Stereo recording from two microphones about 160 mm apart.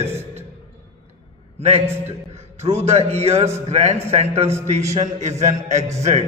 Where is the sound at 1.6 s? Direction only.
45° right (ahead or behind).